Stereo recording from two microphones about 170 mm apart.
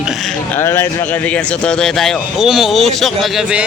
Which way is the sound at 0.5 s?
15° left (ahead or behind).